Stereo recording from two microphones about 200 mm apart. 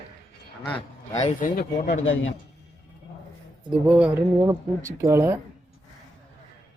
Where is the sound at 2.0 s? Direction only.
80° left.